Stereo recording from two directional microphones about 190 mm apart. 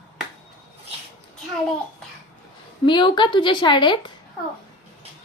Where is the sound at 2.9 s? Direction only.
25° left (ahead or behind).